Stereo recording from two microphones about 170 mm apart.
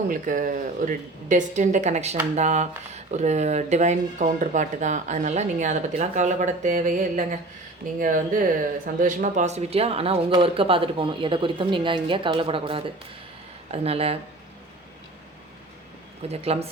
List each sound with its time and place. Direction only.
0.1 s speech: 50° right (ahead or behind); by 14.2 s 35° right (ahead or behind)
16.3 s speech: 35° right (ahead or behind)